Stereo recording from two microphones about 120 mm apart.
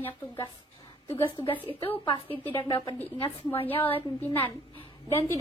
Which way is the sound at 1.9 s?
50° left (ahead or behind).